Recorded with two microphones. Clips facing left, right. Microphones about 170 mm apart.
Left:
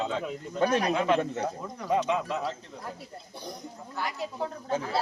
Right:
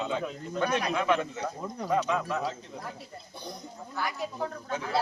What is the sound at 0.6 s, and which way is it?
Speech, 35° left (ahead or behind).